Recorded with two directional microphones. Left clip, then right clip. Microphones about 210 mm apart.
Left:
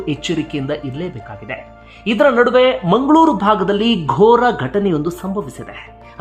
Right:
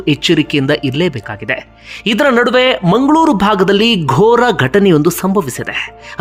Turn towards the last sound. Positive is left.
turn(degrees=-25)  # may be behind; listen again after turning